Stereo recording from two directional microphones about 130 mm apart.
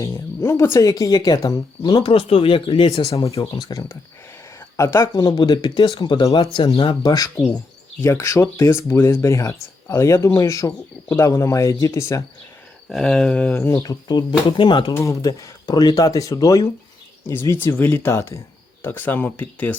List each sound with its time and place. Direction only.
0.0 s speech: 25° left (ahead or behind); by 3.2 s 50° left (ahead or behind)
3.5 s speech: 25° left (ahead or behind)
6.3 s speech: 45° left (ahead or behind)
7.1 s speech: 30° left (ahead or behind)
12.9 s speech: 5° left (ahead or behind)
13.8 s speech: 30° left (ahead or behind)
14.9 s speech: 25° left (ahead or behind)